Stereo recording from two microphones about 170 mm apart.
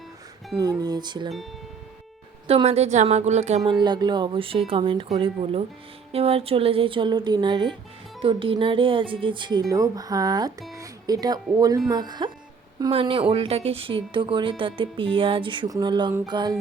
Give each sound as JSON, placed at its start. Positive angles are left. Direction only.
{"t": 0.6, "sound": "speech", "side_deg": -20}
{"t": 2.5, "sound": "speech", "side_deg": -35}
{"t": 3.7, "sound": "speech", "side_deg": -25}